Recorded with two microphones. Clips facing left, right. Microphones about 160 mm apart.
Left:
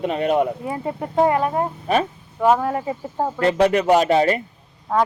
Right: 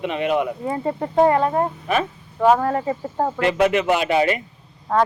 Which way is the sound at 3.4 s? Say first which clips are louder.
Left 2 dB; 35° left (ahead or behind).